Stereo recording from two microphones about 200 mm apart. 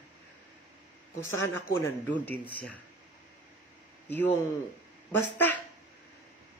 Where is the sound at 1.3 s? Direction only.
75° left (ahead or behind).